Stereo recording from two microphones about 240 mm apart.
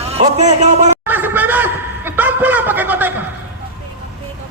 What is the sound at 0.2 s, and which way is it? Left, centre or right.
Speech, right.